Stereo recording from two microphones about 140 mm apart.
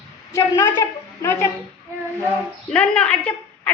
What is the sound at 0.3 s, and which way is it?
A woman's voice, 25° left (ahead or behind).